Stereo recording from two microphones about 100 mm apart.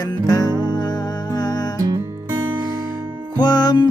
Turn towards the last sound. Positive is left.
turn(degrees=45)  # may be behind; listen again after turning